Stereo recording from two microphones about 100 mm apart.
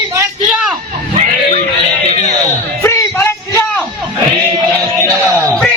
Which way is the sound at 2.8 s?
30° left (ahead or behind).